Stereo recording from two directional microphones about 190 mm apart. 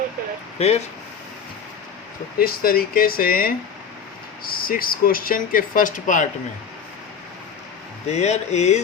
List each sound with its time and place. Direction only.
0.6 s speech: 30° left (ahead or behind)
2.4 s speech: 50° left (ahead or behind)
8.1 s speech: 35° left (ahead or behind)